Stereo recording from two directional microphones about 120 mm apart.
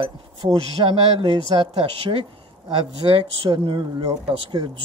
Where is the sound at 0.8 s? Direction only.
50° right (ahead or behind).